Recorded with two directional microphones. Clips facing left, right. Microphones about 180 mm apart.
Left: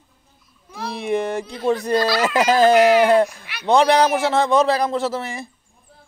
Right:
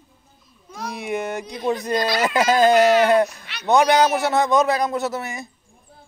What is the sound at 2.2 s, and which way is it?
Speech, 10° left (ahead or behind).